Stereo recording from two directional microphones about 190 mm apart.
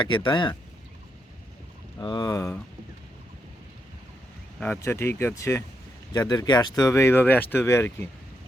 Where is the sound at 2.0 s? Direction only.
20° left (ahead or behind).